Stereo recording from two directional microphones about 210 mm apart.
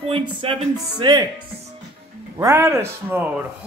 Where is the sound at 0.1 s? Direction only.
25° right (ahead or behind).